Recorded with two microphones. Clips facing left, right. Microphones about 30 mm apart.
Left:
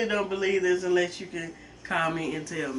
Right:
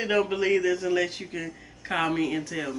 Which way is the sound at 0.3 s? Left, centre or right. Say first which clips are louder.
Right 1 dB; centre.